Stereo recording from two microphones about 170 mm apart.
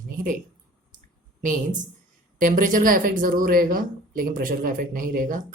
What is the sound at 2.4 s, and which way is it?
Speech, 50° right (ahead or behind).